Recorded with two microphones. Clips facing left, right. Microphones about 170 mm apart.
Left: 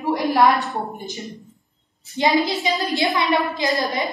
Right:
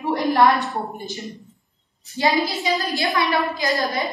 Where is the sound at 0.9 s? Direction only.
20° left (ahead or behind).